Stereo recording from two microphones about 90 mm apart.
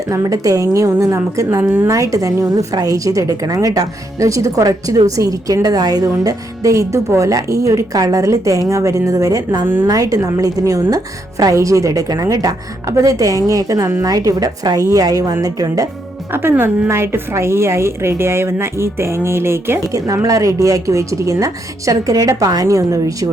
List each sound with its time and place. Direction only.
0.1 s a woman's voice: 40° right (ahead or behind)
16.3 s a woman's voice: 25° right (ahead or behind)
20.2 s a woman's voice: 40° right (ahead or behind)